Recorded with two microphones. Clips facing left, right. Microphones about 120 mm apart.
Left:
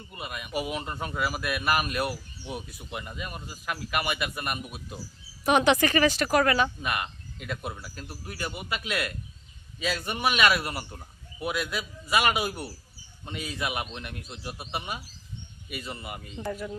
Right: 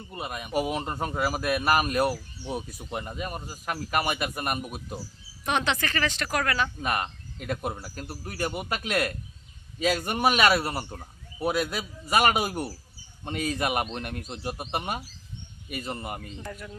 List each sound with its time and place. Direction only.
0.1 s speech: 35° right (ahead or behind)
5.5 s speech: 10° left (ahead or behind)
6.8 s a man's voice: 40° right (ahead or behind)
16.4 s speech: 10° left (ahead or behind)